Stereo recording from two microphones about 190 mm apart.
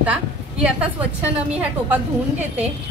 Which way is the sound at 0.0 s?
5° right (ahead or behind).